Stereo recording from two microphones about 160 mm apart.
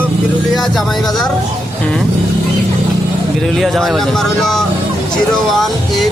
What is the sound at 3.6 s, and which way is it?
Speech, centre (ahead or behind).